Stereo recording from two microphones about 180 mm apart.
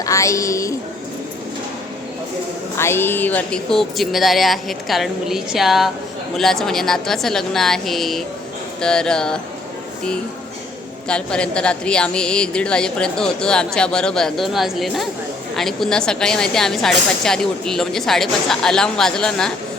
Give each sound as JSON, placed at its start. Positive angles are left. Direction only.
{"t": 0.0, "sound": "music", "side_deg": 15}
{"t": 2.7, "sound": "a woman's voice", "side_deg": 15}
{"t": 11.1, "sound": "a woman's voice", "side_deg": 5}